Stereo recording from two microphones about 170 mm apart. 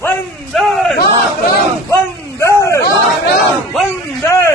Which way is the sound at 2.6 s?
15° left (ahead or behind).